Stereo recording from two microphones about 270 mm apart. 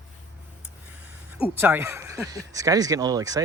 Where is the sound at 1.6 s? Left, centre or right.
Centre.